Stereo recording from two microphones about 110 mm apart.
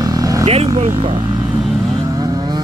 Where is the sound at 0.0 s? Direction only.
35° right (ahead or behind).